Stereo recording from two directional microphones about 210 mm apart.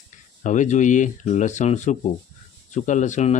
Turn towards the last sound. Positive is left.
turn(degrees=35)  # may be behind; listen again after turning